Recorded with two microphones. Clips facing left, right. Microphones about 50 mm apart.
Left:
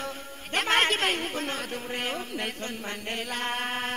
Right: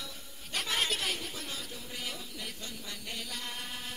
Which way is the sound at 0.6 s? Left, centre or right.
Left.